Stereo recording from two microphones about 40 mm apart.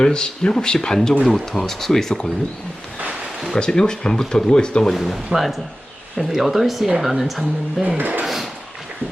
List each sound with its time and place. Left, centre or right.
0.0 s speech: centre
1.2 s speech: centre
3.5 s speech: centre
4.9 s speech: centre
7.9 s dishes: right